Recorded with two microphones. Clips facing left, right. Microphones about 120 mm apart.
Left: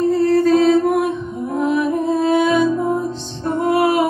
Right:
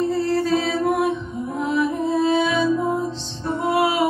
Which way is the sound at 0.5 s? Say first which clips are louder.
Left 7 dB; 50° left (ahead or behind).